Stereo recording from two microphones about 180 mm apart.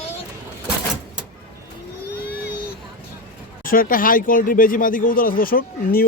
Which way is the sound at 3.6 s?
50° left (ahead or behind).